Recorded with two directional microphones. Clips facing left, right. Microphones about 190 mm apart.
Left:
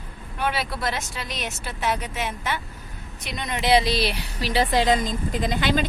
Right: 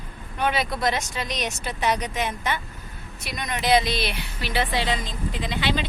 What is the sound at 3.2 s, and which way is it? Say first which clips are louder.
Speech: left 1 dB; 25° left (ahead or behind).